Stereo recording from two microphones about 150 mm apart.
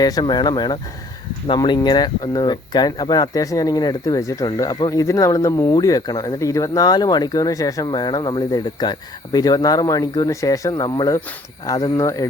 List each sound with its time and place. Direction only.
0.0 s speech: 25° left (ahead or behind)